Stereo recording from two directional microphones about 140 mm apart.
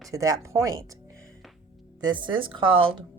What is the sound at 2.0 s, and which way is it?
A woman's voice, 35° right (ahead or behind).